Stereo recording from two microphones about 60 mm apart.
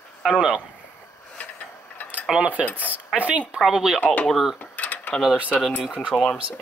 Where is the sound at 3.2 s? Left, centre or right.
Right.